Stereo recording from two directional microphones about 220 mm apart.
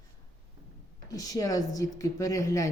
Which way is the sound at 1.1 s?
15° left (ahead or behind).